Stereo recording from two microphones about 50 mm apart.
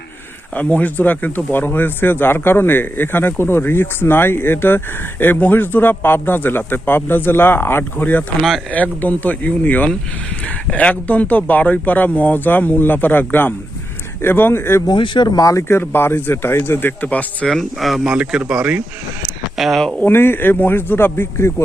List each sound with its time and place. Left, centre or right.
0.5 s speech: left
8.4 s speech: centre
8.7 s a man's voice: left
17.0 s a man's voice: left
17.5 s speech: centre
18.0 s a man's voice: centre
19.5 s speech: centre
20.1 s speech: left